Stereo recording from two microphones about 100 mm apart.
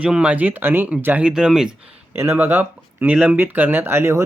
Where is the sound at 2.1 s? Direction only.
20° right (ahead or behind).